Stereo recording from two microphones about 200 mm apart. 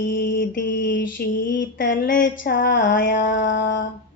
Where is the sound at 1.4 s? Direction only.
65° left (ahead or behind).